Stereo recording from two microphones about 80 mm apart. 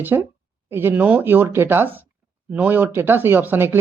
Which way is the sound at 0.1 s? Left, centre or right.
Right.